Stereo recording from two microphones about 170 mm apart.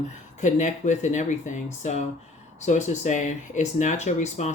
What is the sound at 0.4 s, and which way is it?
Speech, 45° left (ahead or behind).